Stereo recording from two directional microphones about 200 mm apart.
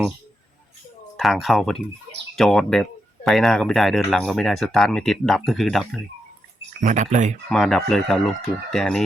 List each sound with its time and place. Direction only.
1.1 s speech: centre (ahead or behind)
6.7 s speech: 40° right (ahead or behind)
7.5 s speech: centre (ahead or behind)